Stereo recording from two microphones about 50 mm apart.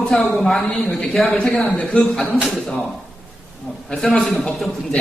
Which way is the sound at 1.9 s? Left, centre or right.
Centre.